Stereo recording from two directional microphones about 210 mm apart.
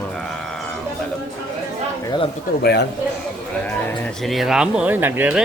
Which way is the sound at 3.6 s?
5° left (ahead or behind).